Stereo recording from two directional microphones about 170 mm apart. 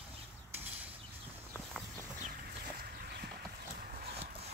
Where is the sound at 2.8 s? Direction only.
65° right (ahead or behind).